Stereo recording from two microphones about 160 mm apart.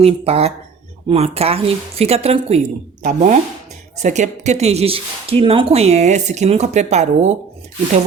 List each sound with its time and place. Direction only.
0.0 s speech: 40° right (ahead or behind)
3.0 s speech: 55° right (ahead or behind)